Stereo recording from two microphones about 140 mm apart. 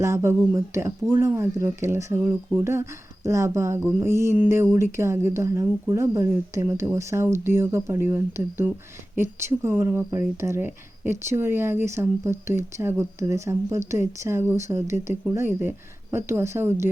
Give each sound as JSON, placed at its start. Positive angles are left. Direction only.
{"t": 0.0, "sound": "speech", "side_deg": -20}